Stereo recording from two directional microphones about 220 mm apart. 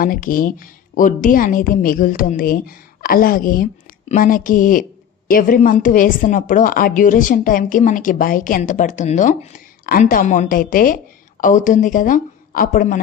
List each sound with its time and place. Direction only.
0.0 s a woman's voice: 40° left (ahead or behind)